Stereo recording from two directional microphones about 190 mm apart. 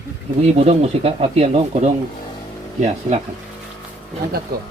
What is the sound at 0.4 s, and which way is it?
Speech, 35° right (ahead or behind).